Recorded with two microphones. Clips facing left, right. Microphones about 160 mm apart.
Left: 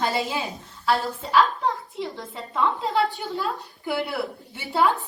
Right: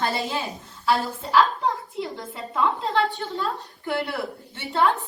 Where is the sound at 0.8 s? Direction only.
Centre (ahead or behind).